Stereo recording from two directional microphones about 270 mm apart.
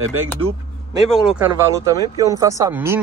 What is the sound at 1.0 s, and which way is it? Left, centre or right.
Speech, centre.